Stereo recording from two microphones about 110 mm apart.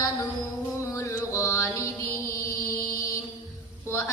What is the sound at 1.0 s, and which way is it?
Mantra, 25° left (ahead or behind).